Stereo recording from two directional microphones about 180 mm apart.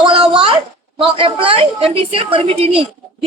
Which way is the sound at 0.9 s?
30° right (ahead or behind).